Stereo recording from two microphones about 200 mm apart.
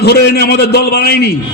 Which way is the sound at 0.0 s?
55° left (ahead or behind).